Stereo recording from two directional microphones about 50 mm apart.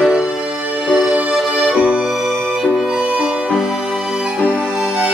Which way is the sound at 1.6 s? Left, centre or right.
Right.